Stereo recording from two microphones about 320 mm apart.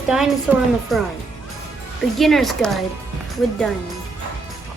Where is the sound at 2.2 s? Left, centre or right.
Centre.